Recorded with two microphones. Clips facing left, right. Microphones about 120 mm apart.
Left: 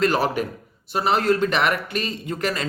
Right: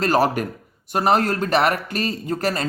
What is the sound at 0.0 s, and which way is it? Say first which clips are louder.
A man's voice: right 2 dB; 40° right (ahead or behind).